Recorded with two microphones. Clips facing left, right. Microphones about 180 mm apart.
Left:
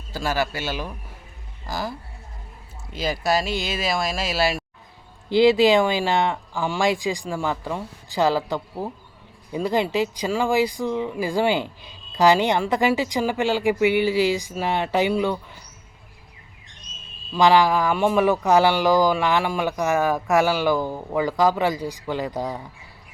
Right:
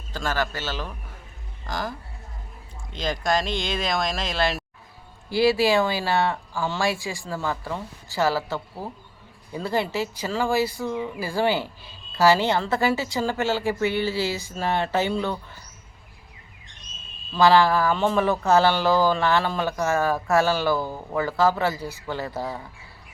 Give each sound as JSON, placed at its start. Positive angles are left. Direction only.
{"t": 0.1, "sound": "speech", "side_deg": 10}
{"t": 5.3, "sound": "speech", "side_deg": 20}
{"t": 17.3, "sound": "speech", "side_deg": 15}